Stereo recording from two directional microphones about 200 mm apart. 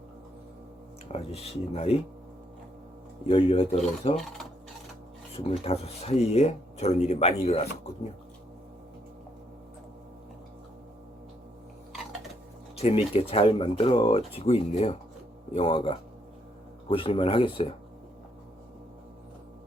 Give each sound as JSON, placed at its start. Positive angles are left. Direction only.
{"t": 1.1, "sound": "speech", "side_deg": 30}
{"t": 3.2, "sound": "speech", "side_deg": 25}
{"t": 5.3, "sound": "speech", "side_deg": 30}
{"t": 12.7, "sound": "speech", "side_deg": 30}